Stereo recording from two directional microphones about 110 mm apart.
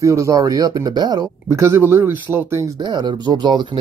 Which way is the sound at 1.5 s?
25° right (ahead or behind).